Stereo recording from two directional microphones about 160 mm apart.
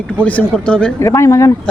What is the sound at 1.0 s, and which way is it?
Speech, 20° left (ahead or behind).